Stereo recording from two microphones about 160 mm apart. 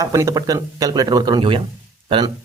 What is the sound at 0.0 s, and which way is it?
Speech, 20° right (ahead or behind).